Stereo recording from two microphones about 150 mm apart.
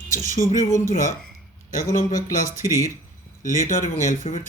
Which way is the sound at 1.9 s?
60° left (ahead or behind).